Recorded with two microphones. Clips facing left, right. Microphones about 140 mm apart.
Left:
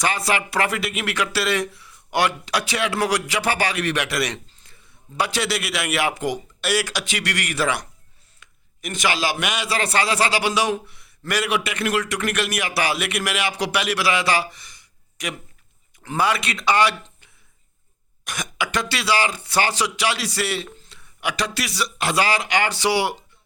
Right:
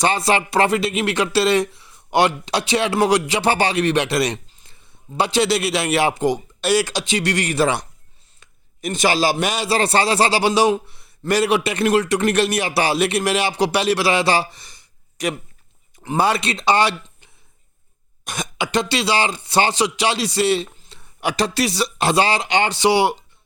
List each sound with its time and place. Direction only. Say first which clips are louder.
0.0 s a man's voice: right 5 dB; 25° right (ahead or behind)
18.3 s a man's voice: right 3 dB; 25° right (ahead or behind)
21.0 s a man's voice: right 5 dB; 30° right (ahead or behind)